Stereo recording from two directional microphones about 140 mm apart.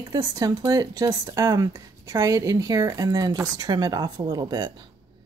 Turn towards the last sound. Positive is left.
turn(degrees=-30)  # may be behind; listen again after turning